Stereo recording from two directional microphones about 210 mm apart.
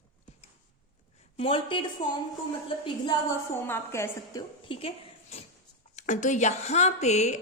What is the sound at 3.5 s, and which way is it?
Speech, 10° left (ahead or behind).